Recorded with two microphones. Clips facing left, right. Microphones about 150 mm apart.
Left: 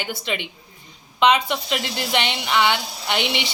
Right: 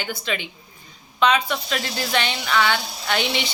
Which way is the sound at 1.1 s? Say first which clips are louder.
Left 2 dB; 20° left (ahead or behind).